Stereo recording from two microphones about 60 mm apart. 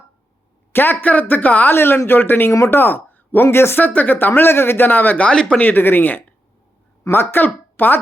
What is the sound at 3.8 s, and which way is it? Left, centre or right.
A woman's voice, left.